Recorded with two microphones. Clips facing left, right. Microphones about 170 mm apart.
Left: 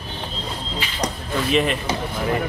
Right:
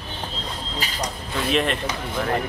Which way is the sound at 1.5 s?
5° left (ahead or behind).